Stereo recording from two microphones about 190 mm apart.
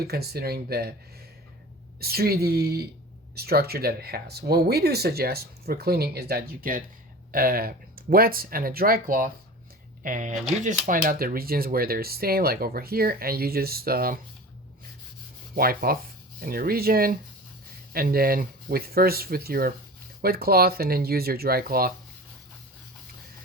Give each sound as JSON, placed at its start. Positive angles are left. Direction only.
{"t": 0.0, "sound": "speech", "side_deg": -55}
{"t": 2.0, "sound": "speech", "side_deg": -55}
{"t": 15.5, "sound": "speech", "side_deg": -50}